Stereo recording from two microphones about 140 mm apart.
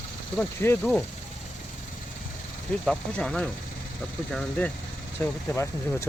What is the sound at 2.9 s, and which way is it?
Speech, 5° left (ahead or behind).